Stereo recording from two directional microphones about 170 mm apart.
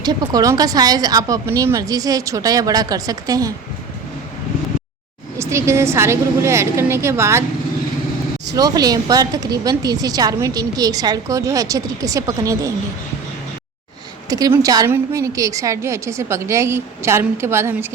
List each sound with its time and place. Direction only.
0.0 s speech: 25° right (ahead or behind)
5.4 s a woman's voice: 15° right (ahead or behind)
8.5 s speech: 20° right (ahead or behind)
14.3 s a woman's voice: 20° right (ahead or behind)